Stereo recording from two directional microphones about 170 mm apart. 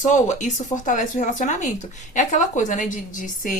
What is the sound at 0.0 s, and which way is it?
Speech, 45° left (ahead or behind).